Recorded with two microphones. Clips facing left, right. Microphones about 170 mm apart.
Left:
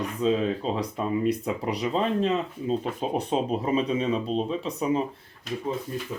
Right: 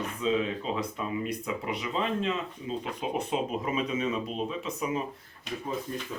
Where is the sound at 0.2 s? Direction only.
40° left (ahead or behind).